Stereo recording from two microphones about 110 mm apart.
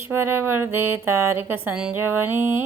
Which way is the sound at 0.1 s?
20° right (ahead or behind).